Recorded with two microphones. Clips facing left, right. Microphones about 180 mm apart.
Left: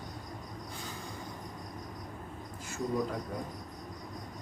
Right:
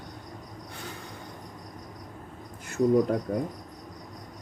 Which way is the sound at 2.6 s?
60° right (ahead or behind).